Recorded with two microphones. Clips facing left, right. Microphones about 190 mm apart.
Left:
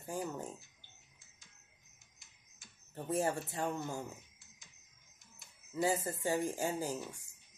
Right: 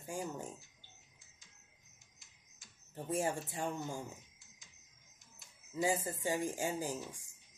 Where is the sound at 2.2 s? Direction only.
60° left (ahead or behind).